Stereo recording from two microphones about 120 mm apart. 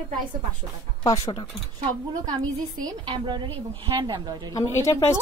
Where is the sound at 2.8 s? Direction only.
40° right (ahead or behind).